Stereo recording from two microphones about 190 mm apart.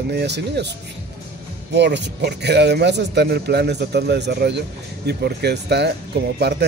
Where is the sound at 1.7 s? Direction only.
65° right (ahead or behind).